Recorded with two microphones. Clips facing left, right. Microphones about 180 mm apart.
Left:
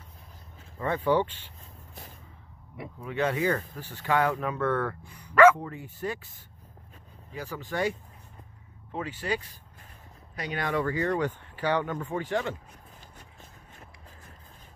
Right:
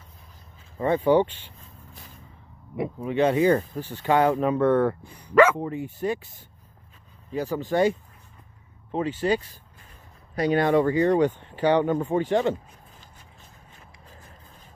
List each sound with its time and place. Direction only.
0.7 s speech: 20° right (ahead or behind)
3.0 s speech: 25° right (ahead or behind)
7.3 s speech: 25° right (ahead or behind)
8.9 s speech: 25° right (ahead or behind)